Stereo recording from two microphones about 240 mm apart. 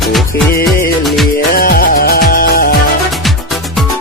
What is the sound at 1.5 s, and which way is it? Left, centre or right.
Music, left.